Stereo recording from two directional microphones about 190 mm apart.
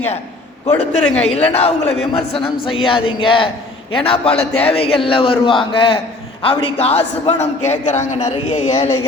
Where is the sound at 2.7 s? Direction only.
25° left (ahead or behind).